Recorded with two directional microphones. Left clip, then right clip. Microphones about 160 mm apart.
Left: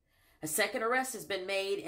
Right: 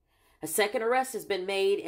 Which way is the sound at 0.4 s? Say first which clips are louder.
Right 4 dB; 20° right (ahead or behind).